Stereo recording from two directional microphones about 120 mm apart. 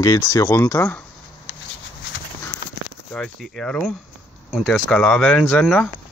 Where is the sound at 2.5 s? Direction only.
20° left (ahead or behind).